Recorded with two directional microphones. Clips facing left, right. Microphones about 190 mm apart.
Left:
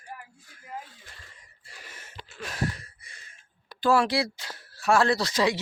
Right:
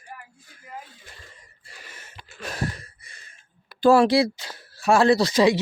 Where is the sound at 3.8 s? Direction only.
35° right (ahead or behind).